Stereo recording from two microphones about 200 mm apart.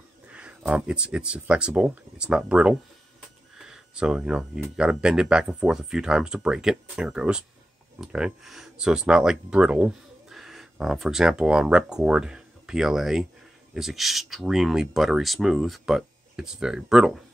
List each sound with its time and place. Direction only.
0.3 s speech: 5° right (ahead or behind)